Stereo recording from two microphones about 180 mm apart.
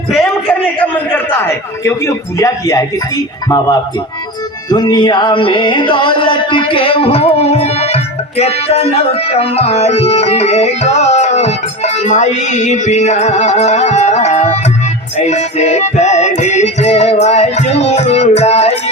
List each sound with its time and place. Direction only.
0.8 s a man's voice: 10° left (ahead or behind)
4.7 s music: 25° left (ahead or behind)